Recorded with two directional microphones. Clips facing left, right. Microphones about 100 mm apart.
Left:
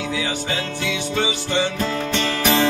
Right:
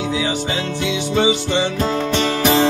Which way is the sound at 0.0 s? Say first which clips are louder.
Right 4 dB; 20° right (ahead or behind).